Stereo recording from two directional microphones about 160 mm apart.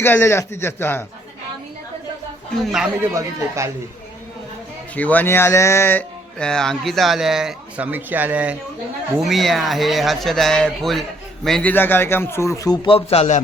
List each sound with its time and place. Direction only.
0.0 s speech: 15° left (ahead or behind)
3.0 s speech: 20° right (ahead or behind)
4.9 s speech: 10° left (ahead or behind); by 13.4 s 45° left (ahead or behind)